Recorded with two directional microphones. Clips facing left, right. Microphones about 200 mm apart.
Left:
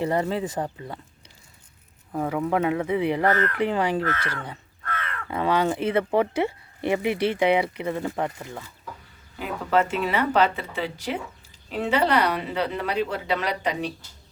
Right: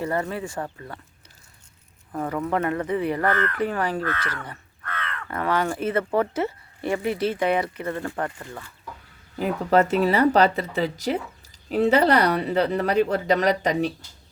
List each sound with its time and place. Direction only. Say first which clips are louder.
0.0 s speech: left 2 dB; 25° left (ahead or behind)
2.1 s speech: left 1 dB; 10° left (ahead or behind)
9.4 s a woman's voice: right 3 dB; 40° right (ahead or behind)